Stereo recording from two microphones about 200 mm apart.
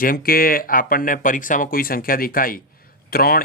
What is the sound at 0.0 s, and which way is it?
Speech, 45° left (ahead or behind).